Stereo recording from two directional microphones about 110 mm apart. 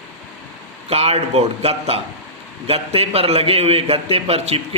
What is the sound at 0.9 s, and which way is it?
A man's voice, 65° right (ahead or behind).